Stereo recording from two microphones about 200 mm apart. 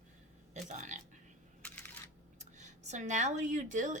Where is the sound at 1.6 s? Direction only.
5° left (ahead or behind).